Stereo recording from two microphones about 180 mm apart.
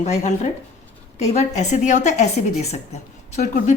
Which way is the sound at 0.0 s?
40° left (ahead or behind).